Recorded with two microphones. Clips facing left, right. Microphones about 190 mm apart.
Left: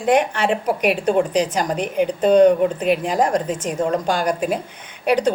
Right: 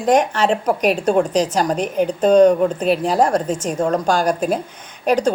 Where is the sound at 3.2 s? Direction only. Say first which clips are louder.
Right 2 dB; 15° left (ahead or behind).